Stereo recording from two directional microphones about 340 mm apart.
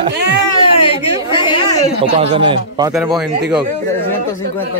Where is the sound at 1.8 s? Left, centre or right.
Centre.